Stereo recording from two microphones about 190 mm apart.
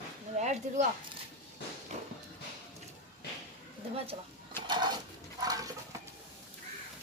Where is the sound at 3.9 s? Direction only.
30° right (ahead or behind).